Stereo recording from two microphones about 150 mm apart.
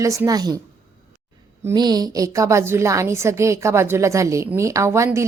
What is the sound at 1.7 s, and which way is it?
A woman's voice, 25° right (ahead or behind).